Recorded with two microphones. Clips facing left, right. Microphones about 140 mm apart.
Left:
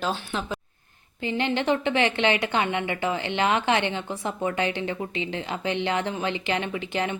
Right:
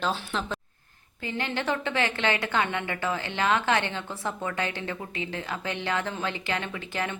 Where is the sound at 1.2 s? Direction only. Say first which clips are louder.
Left 5 dB; 20° left (ahead or behind).